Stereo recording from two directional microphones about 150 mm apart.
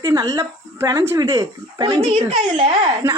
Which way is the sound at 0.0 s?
25° right (ahead or behind).